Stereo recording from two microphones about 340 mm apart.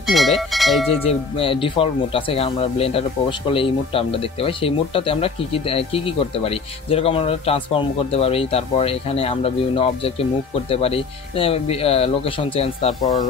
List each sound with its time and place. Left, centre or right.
0.0 s speech: centre
1.0 s speech: centre